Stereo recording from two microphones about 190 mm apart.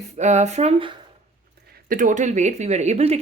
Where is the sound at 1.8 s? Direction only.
45° right (ahead or behind).